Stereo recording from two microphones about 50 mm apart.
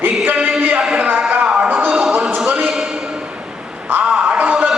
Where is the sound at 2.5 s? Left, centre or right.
Centre.